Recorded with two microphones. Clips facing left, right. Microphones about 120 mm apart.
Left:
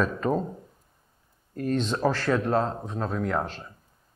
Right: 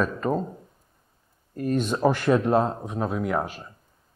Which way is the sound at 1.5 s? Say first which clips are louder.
Right 2 dB; 5° right (ahead or behind).